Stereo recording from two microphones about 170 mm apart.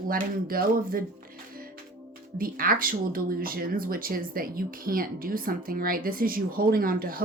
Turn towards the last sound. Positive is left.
turn(degrees=-60)  # may be behind; listen again after turning